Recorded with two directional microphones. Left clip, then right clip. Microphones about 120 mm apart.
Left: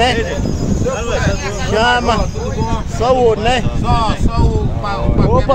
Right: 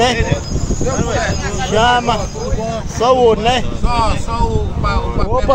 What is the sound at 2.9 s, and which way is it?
Speech, 20° right (ahead or behind).